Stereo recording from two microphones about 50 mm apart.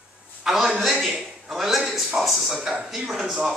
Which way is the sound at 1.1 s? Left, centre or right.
Centre.